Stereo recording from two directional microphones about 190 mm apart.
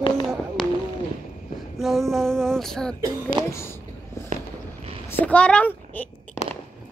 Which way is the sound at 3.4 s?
20° right (ahead or behind).